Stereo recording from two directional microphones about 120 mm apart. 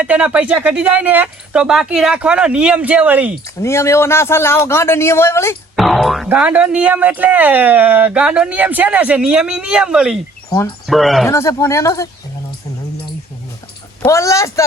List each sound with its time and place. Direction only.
0.0 s speech: 10° right (ahead or behind)
3.6 s a man's voice: 20° left (ahead or behind)
5.7 s speech: centre (ahead or behind)
6.2 s speech: 10° right (ahead or behind)
11.3 s a man's voice: 25° left (ahead or behind)
14.1 s a man's voice: 25° left (ahead or behind)